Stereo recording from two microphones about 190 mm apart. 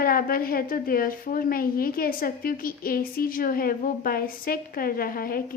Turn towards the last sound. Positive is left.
turn(degrees=50)  # may be behind; listen again after turning